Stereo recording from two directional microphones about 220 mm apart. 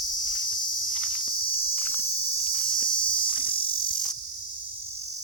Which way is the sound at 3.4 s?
25° left (ahead or behind).